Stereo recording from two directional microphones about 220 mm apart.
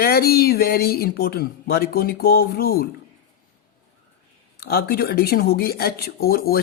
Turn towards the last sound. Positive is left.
turn(degrees=45)  # may be behind; listen again after turning